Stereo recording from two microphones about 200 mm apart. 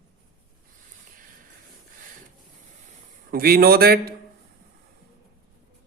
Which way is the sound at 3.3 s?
45° right (ahead or behind).